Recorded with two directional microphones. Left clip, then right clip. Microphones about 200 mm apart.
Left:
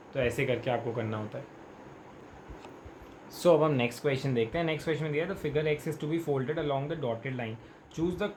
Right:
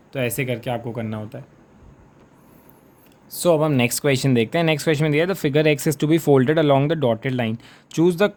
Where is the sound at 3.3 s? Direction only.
55° right (ahead or behind).